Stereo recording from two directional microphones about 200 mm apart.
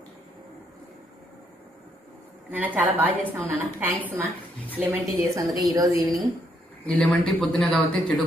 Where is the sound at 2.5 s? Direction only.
10° right (ahead or behind).